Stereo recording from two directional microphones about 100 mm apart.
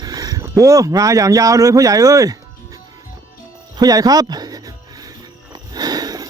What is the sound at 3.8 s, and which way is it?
Speech, 40° right (ahead or behind).